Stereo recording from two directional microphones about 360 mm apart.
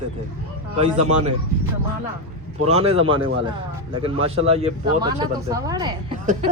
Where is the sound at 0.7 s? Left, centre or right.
Centre.